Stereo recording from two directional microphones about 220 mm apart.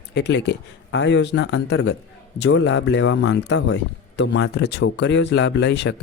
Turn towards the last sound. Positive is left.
turn(degrees=55)  # may be behind; listen again after turning